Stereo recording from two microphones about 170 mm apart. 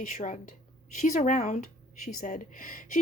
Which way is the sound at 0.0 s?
50° left (ahead or behind).